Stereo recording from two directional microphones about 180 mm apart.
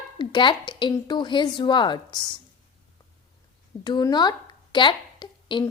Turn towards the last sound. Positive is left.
turn(degrees=25)  # may be behind; listen again after turning